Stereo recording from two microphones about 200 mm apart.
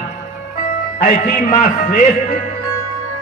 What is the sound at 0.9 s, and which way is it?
Speech, 40° left (ahead or behind).